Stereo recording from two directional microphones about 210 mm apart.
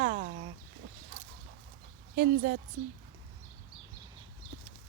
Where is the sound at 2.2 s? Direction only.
45° right (ahead or behind).